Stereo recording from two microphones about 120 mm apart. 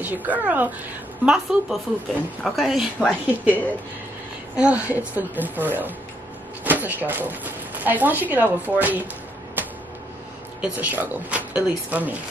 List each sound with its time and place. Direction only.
0.0 s speech: 15° right (ahead or behind)
4.6 s speech: 10° right (ahead or behind)
9.6 s a sound: 15° right (ahead or behind)
10.6 s speech: 15° right (ahead or behind)